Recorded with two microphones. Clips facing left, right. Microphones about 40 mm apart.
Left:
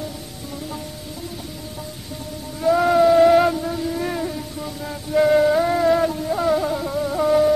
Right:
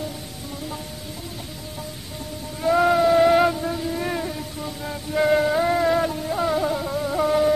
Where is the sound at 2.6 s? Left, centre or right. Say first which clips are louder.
Left 2 dB; centre.